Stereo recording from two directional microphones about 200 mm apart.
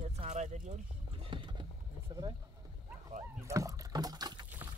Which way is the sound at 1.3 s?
25° right (ahead or behind).